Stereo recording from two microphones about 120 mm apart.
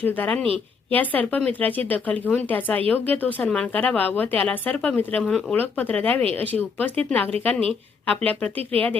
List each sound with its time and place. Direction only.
0.0 s speech: 15° left (ahead or behind)